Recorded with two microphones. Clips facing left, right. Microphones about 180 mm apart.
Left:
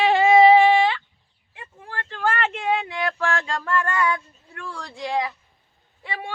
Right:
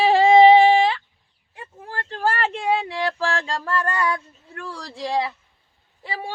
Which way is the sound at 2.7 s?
30° right (ahead or behind).